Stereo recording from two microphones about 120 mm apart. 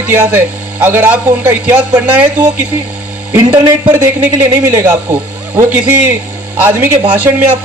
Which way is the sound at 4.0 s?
20° right (ahead or behind).